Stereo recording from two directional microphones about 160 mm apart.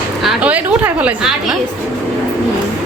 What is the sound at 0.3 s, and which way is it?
A woman's voice, 10° right (ahead or behind).